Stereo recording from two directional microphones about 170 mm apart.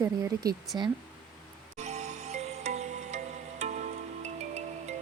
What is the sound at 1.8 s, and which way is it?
Music, 40° right (ahead or behind).